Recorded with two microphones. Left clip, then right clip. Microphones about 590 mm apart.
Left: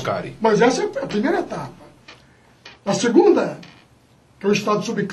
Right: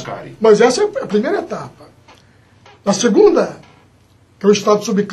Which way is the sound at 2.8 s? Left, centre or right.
Right.